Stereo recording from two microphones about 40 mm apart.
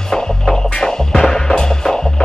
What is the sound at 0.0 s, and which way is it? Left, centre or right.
Music, centre.